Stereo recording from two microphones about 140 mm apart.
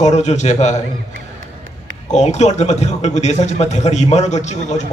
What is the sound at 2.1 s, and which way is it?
A man's voice, 55° left (ahead or behind).